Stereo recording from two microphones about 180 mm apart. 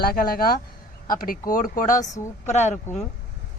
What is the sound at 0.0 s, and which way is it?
Speech, 55° left (ahead or behind).